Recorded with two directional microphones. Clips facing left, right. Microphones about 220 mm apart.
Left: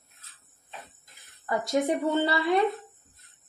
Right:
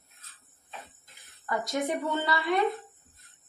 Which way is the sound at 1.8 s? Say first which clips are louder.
Left 4 dB; 30° left (ahead or behind).